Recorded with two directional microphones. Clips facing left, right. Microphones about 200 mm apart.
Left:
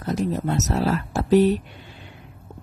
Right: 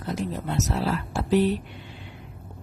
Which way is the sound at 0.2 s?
45° left (ahead or behind).